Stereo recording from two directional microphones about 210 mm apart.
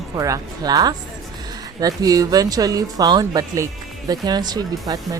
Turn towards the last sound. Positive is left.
turn(degrees=-20)  # may be behind; listen again after turning